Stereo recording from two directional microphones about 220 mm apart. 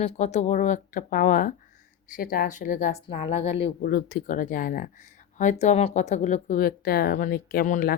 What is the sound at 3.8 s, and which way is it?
Speech, 45° left (ahead or behind).